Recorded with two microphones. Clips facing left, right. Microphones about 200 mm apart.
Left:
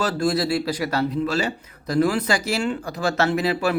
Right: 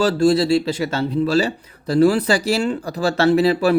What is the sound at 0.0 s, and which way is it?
Speech, 30° right (ahead or behind).